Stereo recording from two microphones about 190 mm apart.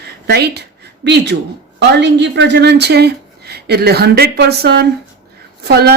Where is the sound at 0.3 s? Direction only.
60° right (ahead or behind).